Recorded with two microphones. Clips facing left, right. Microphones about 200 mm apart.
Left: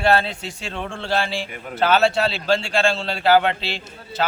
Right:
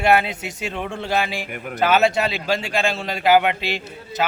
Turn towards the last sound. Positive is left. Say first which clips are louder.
# right 1 dB
turn(degrees=-10)  # may be behind; listen again after turning